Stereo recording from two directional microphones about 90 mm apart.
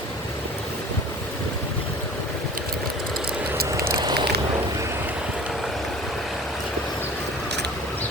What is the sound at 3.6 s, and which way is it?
Vehicle, 35° right (ahead or behind).